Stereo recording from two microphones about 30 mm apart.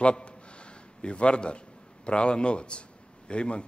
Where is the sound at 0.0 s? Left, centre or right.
Left.